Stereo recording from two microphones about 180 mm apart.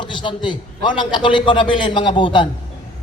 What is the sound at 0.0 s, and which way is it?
A man's voice, 25° left (ahead or behind).